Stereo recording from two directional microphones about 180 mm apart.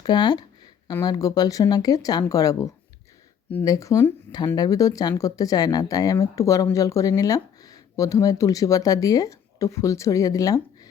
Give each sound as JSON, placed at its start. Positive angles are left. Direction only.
{"t": 0.0, "sound": "speech", "side_deg": 25}